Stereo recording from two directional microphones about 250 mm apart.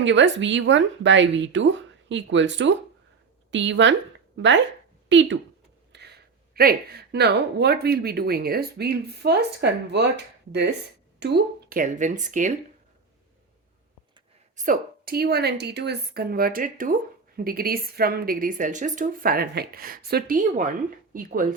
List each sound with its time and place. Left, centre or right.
0.0 s speech: right
5.0 s speech: right
6.5 s speech: right
14.5 s speech: right